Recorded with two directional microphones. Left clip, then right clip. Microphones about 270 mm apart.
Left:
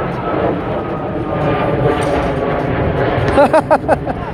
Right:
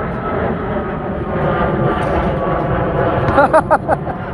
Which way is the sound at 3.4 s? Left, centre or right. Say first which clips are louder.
Left 1 dB; left.